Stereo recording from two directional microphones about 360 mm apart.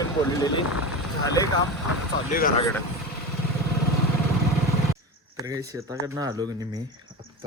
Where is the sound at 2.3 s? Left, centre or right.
Left.